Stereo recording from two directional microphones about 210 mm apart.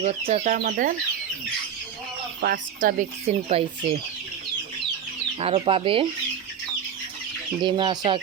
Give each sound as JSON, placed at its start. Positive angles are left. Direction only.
{"t": 0.0, "sound": "speech", "side_deg": -30}
{"t": 2.4, "sound": "speech", "side_deg": -45}
{"t": 5.4, "sound": "speech", "side_deg": -25}
{"t": 7.6, "sound": "speech", "side_deg": -20}